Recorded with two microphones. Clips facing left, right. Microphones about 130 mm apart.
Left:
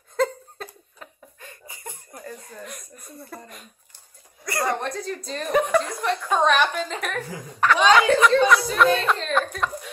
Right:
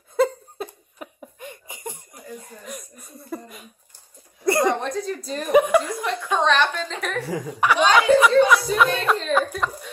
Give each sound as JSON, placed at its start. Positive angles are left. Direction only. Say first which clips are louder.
{"t": 0.1, "sound": "laughter", "louder": "right 3 dB", "side_deg": -10}
{"t": 2.6, "sound": "speech", "louder": "right 2 dB", "side_deg": 0}
{"t": 4.5, "sound": "a sound", "louder": "right 6 dB", "side_deg": -20}
{"t": 4.7, "sound": "speech", "louder": "right 2 dB", "side_deg": 0}
{"t": 6.3, "sound": "a woman's voice", "louder": "even", "side_deg": 10}